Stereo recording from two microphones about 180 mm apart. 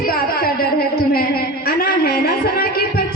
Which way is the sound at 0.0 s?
55° left (ahead or behind).